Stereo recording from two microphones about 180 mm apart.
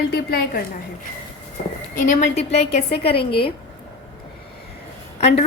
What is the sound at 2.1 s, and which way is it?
A woman's voice, 40° left (ahead or behind).